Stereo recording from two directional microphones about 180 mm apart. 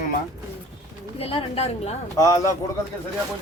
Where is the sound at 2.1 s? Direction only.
20° left (ahead or behind).